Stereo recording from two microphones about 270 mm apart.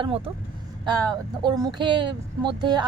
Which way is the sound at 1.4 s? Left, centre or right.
Centre.